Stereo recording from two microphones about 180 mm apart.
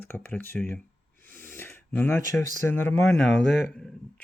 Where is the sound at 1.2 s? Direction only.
10° left (ahead or behind).